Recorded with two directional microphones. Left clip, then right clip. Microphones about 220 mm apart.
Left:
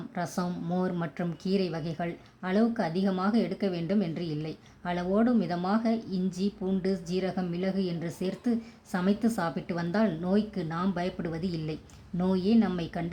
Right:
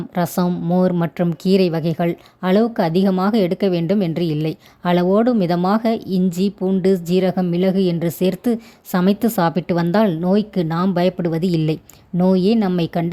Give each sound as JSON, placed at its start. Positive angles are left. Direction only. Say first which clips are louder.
{"t": 0.1, "sound": "a woman's voice", "louder": "right 13 dB", "side_deg": -40}